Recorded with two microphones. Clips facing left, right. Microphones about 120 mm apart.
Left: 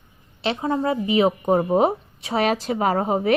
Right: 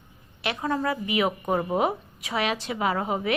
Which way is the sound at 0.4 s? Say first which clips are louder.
Left 4 dB; 25° left (ahead or behind).